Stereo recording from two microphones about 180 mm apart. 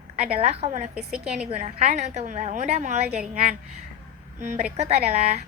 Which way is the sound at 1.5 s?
40° right (ahead or behind).